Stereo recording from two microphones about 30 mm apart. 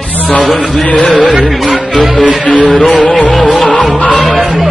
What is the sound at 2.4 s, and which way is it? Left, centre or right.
Music, left.